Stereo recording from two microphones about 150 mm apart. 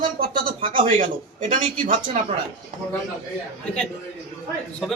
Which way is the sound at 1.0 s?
60° right (ahead or behind).